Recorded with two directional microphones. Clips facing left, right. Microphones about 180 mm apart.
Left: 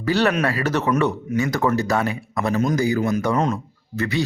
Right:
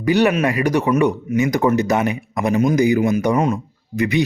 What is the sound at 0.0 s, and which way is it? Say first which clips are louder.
Speech: right 4 dB; 15° right (ahead or behind).